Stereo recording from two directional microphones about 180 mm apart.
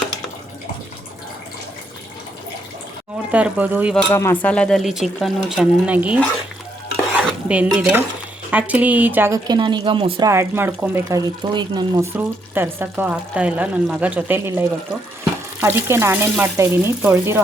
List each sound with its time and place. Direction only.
3.3 s speech: 10° right (ahead or behind)
3.9 s speech: 10° left (ahead or behind); by 6.1 s 5° right (ahead or behind)
7.2 s dishes: 5° right (ahead or behind)
8.4 s speech: 10° right (ahead or behind); by 10.2 s 30° right (ahead or behind)
10.2 s speech: 15° right (ahead or behind)
11.5 s speech: 25° right (ahead or behind)
12.1 s speech: 10° right (ahead or behind)